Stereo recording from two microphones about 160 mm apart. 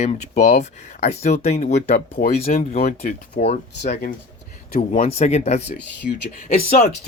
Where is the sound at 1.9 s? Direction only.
70° left (ahead or behind).